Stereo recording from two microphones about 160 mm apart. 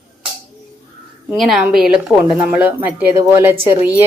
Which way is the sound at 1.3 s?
Centre (ahead or behind).